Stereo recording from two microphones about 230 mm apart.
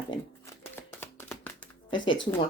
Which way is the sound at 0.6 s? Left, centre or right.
Centre.